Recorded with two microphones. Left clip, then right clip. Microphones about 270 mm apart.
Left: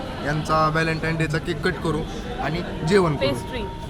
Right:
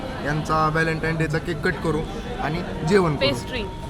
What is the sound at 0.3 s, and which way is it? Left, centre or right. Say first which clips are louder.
A man's voice: left 1 dB; centre.